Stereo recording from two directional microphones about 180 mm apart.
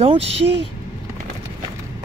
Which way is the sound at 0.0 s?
35° right (ahead or behind).